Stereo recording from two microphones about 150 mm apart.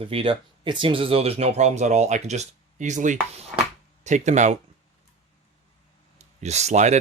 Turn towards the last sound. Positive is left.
turn(degrees=-50)  # may be behind; listen again after turning